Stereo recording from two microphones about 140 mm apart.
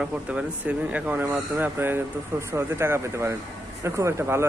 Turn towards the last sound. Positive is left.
turn(degrees=-20)  # may be behind; listen again after turning